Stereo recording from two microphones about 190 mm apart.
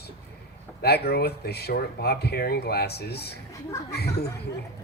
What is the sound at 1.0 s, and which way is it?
Speech, 55° left (ahead or behind).